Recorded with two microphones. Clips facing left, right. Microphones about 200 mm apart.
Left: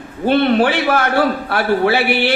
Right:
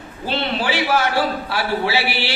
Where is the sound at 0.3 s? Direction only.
55° left (ahead or behind).